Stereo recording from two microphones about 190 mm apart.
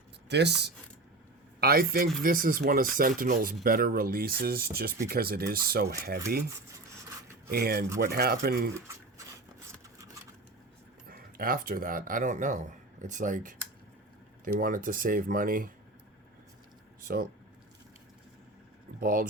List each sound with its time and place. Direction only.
0.3 s speech: 65° right (ahead or behind)
1.6 s speech: 50° right (ahead or behind)
7.5 s speech: 55° right (ahead or behind)
8.7 s a sound: 15° right (ahead or behind)
11.1 s speech: 50° right (ahead or behind)
18.9 s speech: 45° right (ahead or behind)